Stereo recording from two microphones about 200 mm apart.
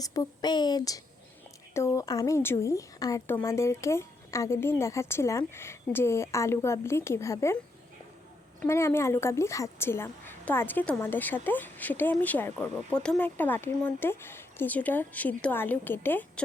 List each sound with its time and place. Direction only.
0.0 s speech: 20° left (ahead or behind)
8.6 s speech: 15° left (ahead or behind)